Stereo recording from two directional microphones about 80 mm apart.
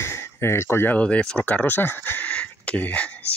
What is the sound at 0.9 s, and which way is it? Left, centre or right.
Speech, centre.